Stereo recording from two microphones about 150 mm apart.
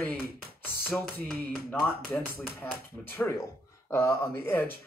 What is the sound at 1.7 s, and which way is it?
Speech, 10° left (ahead or behind).